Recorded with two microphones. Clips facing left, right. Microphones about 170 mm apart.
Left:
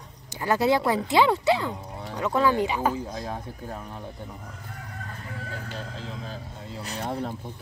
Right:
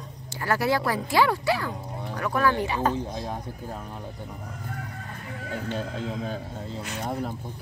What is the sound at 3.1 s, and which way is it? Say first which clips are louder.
Speech: right 1 dB; 15° right (ahead or behind).